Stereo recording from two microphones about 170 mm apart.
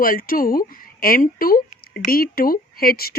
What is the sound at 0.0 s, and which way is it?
A woman's voice, 60° left (ahead or behind).